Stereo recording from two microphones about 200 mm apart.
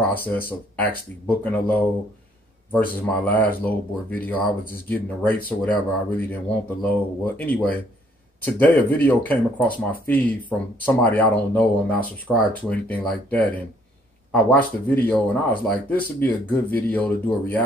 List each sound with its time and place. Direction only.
0.0 s speech: 10° left (ahead or behind)